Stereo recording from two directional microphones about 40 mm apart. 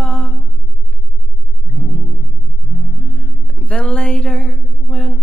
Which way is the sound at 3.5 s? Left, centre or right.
Left.